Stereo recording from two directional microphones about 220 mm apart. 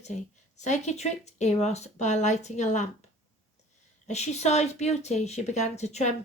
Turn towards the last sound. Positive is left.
turn(degrees=30)  # may be behind; listen again after turning